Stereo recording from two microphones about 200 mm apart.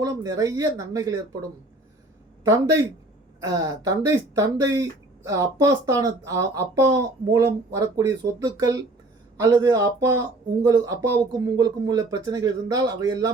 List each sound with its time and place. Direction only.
0.0 s speech: 15° right (ahead or behind)